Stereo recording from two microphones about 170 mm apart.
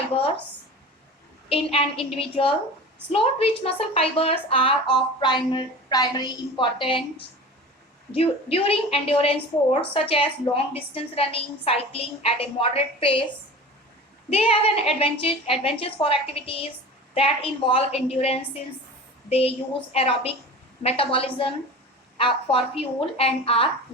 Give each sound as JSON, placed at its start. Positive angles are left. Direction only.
{"t": 0.1, "sound": "a woman's voice", "side_deg": 35}
{"t": 1.5, "sound": "a woman's voice", "side_deg": 35}
{"t": 14.3, "sound": "a woman's voice", "side_deg": 35}